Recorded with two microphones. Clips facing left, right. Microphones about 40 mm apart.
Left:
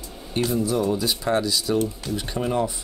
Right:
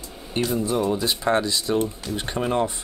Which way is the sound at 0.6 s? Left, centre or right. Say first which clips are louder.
Even; right.